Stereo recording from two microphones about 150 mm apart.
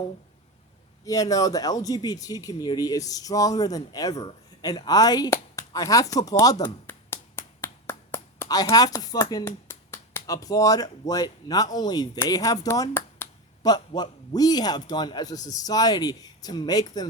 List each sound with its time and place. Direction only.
1.0 s a man's voice: 25° left (ahead or behind)
6.8 s a sound: 15° left (ahead or behind)
9.6 s a man's voice: 15° left (ahead or behind)